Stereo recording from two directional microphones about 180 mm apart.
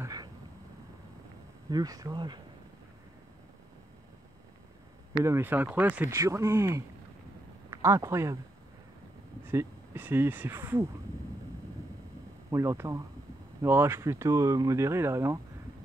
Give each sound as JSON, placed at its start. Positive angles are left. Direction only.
{"t": 0.0, "sound": "a sound", "side_deg": -20}
{"t": 1.7, "sound": "speech", "side_deg": -20}
{"t": 5.2, "sound": "speech", "side_deg": -15}
{"t": 9.5, "sound": "speech", "side_deg": -10}
{"t": 12.4, "sound": "speech", "side_deg": -15}